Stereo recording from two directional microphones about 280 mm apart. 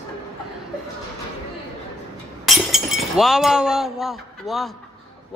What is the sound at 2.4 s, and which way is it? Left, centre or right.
Speech, centre.